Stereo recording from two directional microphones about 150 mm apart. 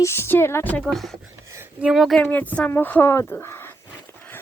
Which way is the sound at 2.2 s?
10° left (ahead or behind).